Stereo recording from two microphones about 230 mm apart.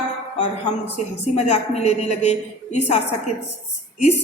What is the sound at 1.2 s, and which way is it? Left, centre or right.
A woman's voice, left.